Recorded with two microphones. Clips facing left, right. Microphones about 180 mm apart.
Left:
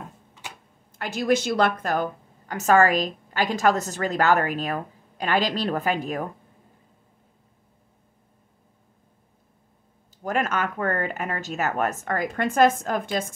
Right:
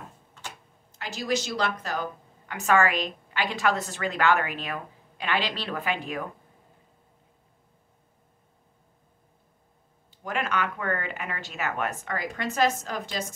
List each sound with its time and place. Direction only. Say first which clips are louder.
0.9 s a woman's voice: left 6 dB; 55° left (ahead or behind)
10.2 s a woman's voice: left 4 dB; 45° left (ahead or behind)